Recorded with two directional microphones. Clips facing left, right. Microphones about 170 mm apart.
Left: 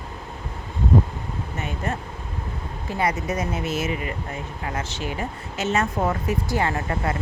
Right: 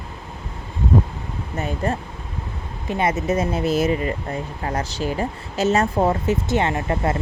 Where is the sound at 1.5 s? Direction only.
35° right (ahead or behind).